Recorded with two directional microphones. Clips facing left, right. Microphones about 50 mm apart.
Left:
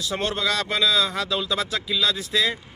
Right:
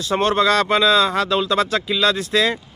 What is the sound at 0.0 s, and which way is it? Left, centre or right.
Speech, right.